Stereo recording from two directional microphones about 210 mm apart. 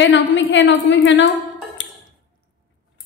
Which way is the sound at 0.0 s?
60° left (ahead or behind).